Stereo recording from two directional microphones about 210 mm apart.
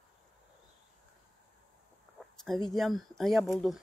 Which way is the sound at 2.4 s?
Centre (ahead or behind).